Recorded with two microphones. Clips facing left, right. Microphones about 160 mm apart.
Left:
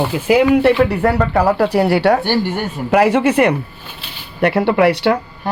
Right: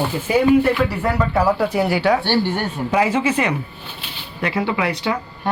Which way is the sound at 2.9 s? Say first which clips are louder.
Left 6 dB; 70° left (ahead or behind).